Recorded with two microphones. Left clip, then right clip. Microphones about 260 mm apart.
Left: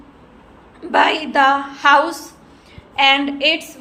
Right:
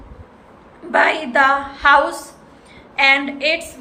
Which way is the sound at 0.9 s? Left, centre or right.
Centre.